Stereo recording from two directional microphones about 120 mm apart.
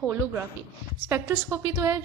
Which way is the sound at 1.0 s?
25° right (ahead or behind).